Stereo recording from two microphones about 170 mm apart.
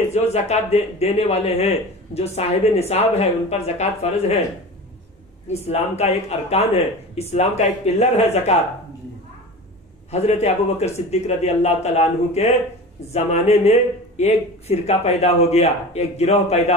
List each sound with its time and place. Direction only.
0.1 s speech: 40° left (ahead or behind)
5.5 s speech: 40° left (ahead or behind)
10.1 s speech: 40° left (ahead or behind)